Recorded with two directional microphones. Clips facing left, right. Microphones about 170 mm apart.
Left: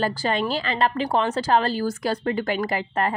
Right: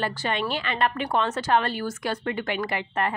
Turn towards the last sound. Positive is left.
turn(degrees=35)  # may be behind; listen again after turning